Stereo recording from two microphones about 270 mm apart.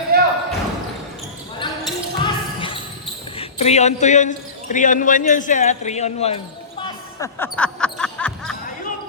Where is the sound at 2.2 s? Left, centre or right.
Centre.